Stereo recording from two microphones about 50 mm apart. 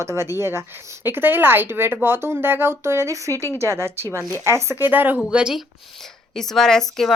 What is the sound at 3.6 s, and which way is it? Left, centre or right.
Speech, right.